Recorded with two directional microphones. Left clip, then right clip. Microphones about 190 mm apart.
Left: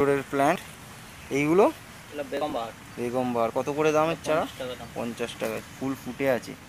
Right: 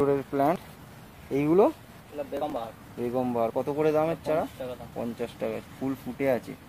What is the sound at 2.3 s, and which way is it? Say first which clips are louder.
Speech: left 2 dB; 25° left (ahead or behind).